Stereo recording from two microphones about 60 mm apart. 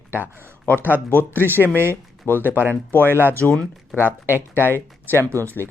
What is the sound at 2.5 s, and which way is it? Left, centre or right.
Speech, right.